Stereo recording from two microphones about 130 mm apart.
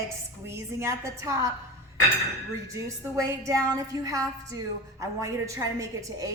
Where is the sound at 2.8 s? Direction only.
25° right (ahead or behind).